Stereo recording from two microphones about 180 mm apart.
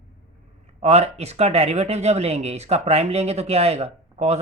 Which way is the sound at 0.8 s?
35° right (ahead or behind).